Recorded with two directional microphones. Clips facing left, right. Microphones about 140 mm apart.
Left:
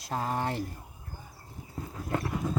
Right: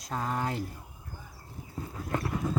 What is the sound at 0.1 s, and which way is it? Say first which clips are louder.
Speech: left 1 dB; 30° left (ahead or behind).